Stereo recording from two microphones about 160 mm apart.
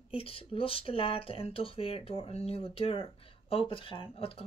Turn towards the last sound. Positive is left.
turn(degrees=35)  # may be behind; listen again after turning